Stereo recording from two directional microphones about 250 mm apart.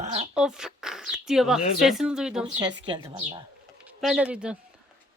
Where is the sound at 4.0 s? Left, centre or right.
Centre.